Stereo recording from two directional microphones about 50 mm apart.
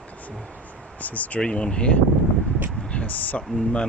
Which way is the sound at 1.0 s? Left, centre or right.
Left.